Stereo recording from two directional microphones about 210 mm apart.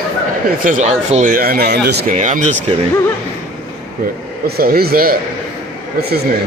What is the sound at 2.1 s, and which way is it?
Speech, 35° right (ahead or behind).